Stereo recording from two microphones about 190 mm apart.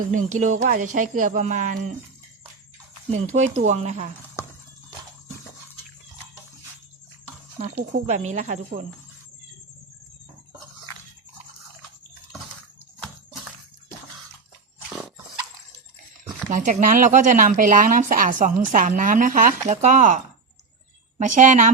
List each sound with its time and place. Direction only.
0.0 s speech: 45° right (ahead or behind)
3.2 s speech: 40° right (ahead or behind)
7.6 s speech: 45° right (ahead or behind)
16.5 s speech: 40° right (ahead or behind)